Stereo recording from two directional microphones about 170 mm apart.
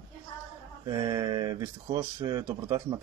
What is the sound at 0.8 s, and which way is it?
Speech, 25° right (ahead or behind).